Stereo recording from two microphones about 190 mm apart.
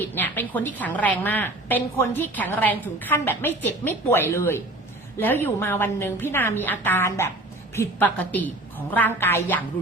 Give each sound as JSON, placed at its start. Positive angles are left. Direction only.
{"t": 0.0, "sound": "a woman's voice", "side_deg": 10}